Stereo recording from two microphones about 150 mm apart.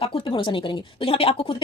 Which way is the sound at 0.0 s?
35° left (ahead or behind).